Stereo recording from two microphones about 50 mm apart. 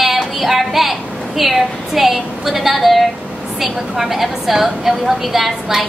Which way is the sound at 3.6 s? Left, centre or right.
Centre.